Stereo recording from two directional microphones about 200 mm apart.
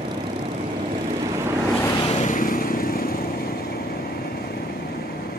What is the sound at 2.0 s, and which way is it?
Vehicle, 35° left (ahead or behind).